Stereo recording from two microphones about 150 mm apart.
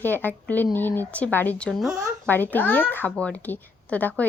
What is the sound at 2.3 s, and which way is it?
Speech, 10° left (ahead or behind).